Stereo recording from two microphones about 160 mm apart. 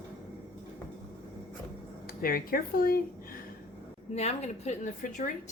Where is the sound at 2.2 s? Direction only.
70° left (ahead or behind).